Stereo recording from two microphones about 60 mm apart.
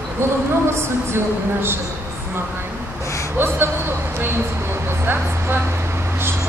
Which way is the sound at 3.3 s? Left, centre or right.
Right.